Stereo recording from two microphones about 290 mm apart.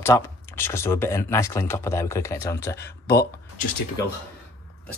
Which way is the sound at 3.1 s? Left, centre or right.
Left.